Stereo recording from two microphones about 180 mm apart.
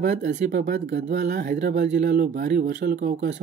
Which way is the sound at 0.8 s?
80° right.